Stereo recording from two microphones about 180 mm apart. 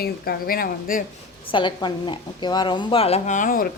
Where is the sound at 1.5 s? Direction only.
25° left (ahead or behind).